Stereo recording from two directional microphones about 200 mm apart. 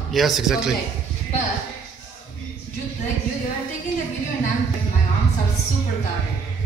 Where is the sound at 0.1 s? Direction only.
Centre (ahead or behind).